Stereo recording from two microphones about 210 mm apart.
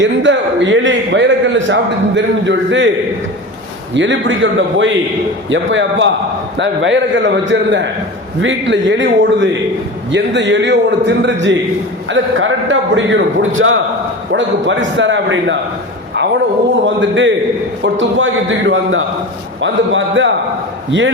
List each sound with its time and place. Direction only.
0.0 s a man's voice: 60° right (ahead or behind)
3.9 s a man's voice: 60° right (ahead or behind)
16.8 s a man's voice: 60° right (ahead or behind)